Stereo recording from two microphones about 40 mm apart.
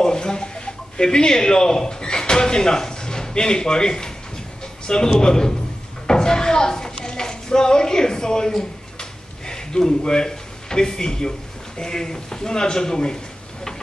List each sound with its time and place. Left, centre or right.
0.0 s a man's voice: centre
6.0 s a sound: centre
9.5 s speech: centre